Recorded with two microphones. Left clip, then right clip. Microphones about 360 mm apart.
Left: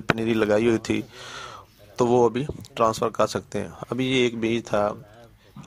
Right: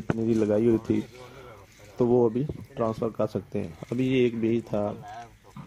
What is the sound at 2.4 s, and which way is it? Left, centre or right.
Speech, left.